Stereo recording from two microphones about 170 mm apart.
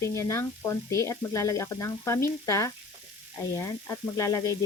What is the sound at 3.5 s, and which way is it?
Frying, 20° left (ahead or behind).